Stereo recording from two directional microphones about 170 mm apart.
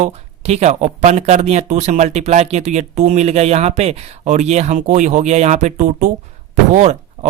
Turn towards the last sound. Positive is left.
turn(degrees=-45)  # may be behind; listen again after turning